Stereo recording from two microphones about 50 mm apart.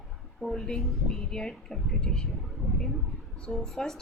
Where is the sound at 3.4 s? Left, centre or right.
Centre.